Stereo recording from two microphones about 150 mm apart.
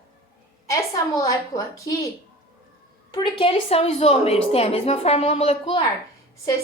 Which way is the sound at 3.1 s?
35° left (ahead or behind).